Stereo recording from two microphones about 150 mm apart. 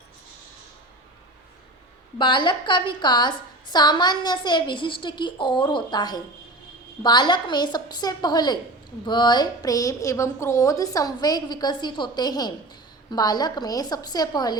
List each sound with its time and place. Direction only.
2.1 s a woman's voice: 30° left (ahead or behind)